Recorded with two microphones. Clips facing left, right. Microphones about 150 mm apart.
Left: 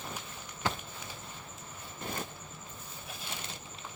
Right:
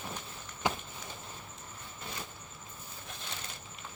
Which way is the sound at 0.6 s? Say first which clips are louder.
Right 2 dB; 15° right (ahead or behind).